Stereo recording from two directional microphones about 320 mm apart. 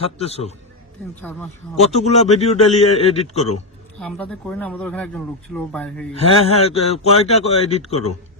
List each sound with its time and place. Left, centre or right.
0.0 s a man's voice: centre
1.2 s speech: centre
1.8 s a man's voice: centre
4.0 s speech: centre
6.1 s a man's voice: centre